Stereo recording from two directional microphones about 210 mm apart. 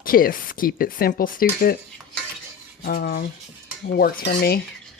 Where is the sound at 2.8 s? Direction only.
45° left (ahead or behind).